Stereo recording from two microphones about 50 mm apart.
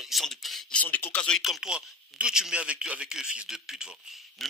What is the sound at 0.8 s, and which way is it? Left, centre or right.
Speech, left.